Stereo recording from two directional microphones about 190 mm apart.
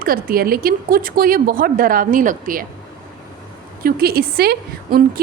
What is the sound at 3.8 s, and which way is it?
A woman's voice, 50° right (ahead or behind).